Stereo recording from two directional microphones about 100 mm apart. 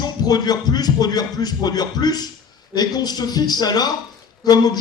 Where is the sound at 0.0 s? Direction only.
40° left (ahead or behind).